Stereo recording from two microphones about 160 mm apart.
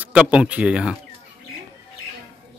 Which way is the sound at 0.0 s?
5° right (ahead or behind).